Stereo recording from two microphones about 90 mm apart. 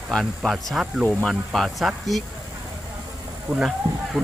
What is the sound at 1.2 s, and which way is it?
Speech, centre (ahead or behind).